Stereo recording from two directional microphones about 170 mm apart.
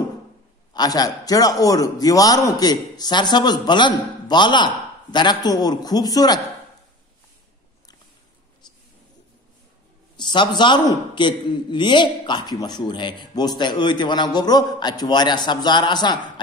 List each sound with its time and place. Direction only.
0.7 s a man's voice: 20° left (ahead or behind)
10.1 s a man's voice: 25° left (ahead or behind)